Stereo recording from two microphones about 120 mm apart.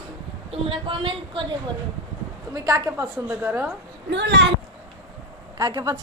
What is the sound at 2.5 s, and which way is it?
Speech, 30° right (ahead or behind).